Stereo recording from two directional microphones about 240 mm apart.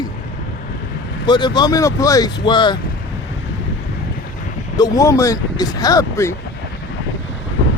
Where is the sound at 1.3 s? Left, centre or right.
Centre.